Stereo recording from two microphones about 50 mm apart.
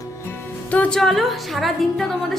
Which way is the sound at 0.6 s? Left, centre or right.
Left.